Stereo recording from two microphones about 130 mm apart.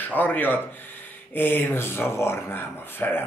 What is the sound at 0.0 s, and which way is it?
Speech, 15° left (ahead or behind).